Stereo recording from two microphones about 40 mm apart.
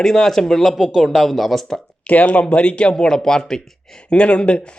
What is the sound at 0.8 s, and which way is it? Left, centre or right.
Speech, centre.